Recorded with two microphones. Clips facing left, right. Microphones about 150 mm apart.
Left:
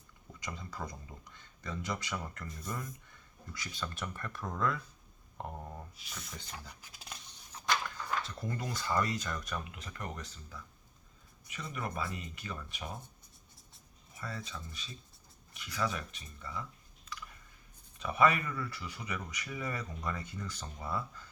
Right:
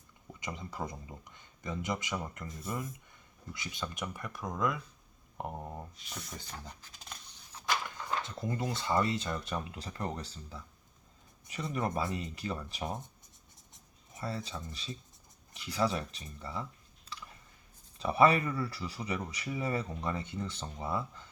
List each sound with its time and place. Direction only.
0.3 s speech: 20° right (ahead or behind)
3.5 s speech: 20° right (ahead or behind)
6.0 s speech: 5° left (ahead or behind)
6.8 s a sound: 5° left (ahead or behind)
7.9 s speech: 25° right (ahead or behind)
14.2 s speech: 30° right (ahead or behind)
17.1 s typing: 35° right (ahead or behind)
17.9 s speech: 30° right (ahead or behind)